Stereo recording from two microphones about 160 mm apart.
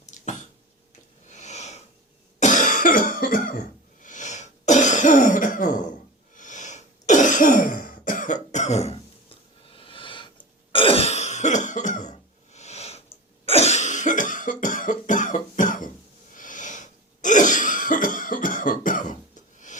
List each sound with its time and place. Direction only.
0.0 s a sound: 50° left (ahead or behind)
1.3 s sniff: 45° left (ahead or behind)
2.4 s cough: 55° left (ahead or behind)
4.0 s throat clearing: 50° left (ahead or behind)
6.3 s cough: 50° left (ahead or behind); by 10.2 s 30° left (ahead or behind)
10.7 s throat clearing: 35° left (ahead or behind)
13.4 s cough: 40° left (ahead or behind)